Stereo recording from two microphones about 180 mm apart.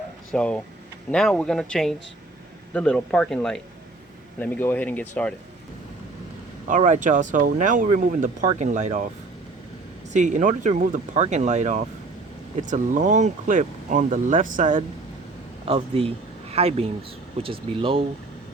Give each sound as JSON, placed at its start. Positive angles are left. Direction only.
{"t": 0.3, "sound": "speech", "side_deg": 5}
{"t": 6.7, "sound": "speech", "side_deg": -40}
{"t": 10.1, "sound": "speech", "side_deg": -40}
{"t": 15.6, "sound": "speech", "side_deg": -35}